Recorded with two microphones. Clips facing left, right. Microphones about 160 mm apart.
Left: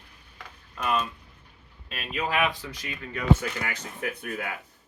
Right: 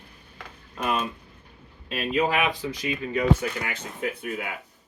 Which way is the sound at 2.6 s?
20° right (ahead or behind).